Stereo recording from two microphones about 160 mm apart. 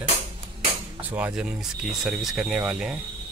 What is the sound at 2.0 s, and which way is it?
Speech, centre (ahead or behind).